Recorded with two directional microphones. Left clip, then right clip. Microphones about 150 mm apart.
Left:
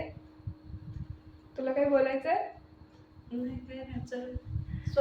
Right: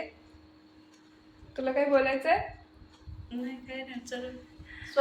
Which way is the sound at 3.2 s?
35° left (ahead or behind).